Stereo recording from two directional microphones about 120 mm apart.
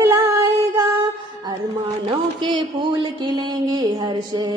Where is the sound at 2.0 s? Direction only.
45° right (ahead or behind).